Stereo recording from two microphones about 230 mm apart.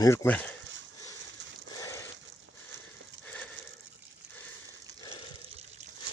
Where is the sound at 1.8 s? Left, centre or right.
Centre.